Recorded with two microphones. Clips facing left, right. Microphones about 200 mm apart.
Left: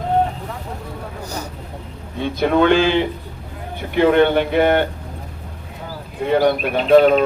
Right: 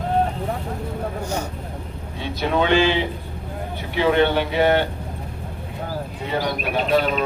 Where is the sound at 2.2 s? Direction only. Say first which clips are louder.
Left 6 dB; 55° left (ahead or behind).